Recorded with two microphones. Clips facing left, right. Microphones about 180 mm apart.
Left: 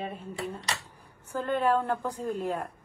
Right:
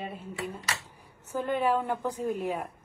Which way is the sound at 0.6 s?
35° left (ahead or behind).